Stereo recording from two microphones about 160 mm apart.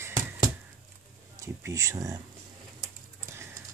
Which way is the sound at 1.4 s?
20° right (ahead or behind).